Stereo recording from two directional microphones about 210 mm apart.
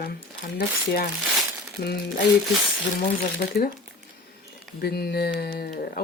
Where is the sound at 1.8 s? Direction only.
50° left (ahead or behind).